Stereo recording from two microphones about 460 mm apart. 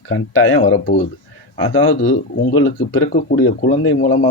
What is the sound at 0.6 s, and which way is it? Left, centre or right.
Speech, centre.